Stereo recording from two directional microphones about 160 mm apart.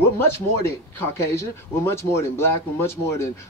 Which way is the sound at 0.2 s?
15° left (ahead or behind).